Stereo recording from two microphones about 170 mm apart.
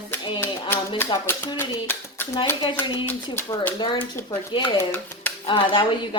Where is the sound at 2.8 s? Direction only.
30° left (ahead or behind).